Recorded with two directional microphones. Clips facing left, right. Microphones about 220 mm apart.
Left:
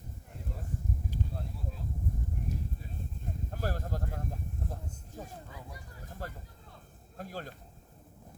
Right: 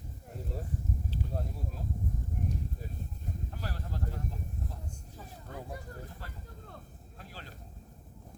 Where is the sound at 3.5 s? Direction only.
45° left (ahead or behind).